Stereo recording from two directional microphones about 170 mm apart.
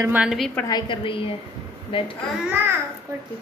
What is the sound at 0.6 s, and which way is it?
A woman's voice, 25° left (ahead or behind).